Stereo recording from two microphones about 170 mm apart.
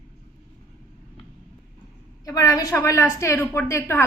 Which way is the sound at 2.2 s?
20° left (ahead or behind).